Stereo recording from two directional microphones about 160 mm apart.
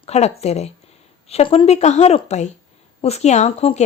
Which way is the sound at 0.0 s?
40° left (ahead or behind).